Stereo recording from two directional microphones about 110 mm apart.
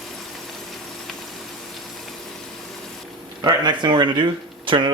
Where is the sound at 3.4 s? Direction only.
45° right (ahead or behind).